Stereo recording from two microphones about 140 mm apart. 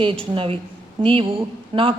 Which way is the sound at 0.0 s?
40° right (ahead or behind).